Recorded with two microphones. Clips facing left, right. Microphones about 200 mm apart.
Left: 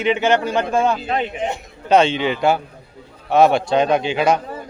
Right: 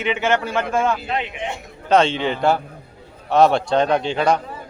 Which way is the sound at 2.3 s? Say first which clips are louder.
Left 1 dB; 10° left (ahead or behind).